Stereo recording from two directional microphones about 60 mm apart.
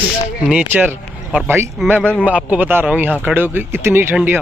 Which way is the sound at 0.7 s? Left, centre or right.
Right.